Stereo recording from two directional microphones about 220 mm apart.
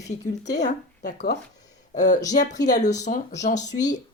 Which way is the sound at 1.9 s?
35° left (ahead or behind).